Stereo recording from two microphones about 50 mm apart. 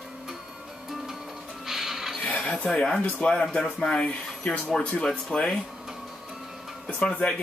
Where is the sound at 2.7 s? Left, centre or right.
Centre.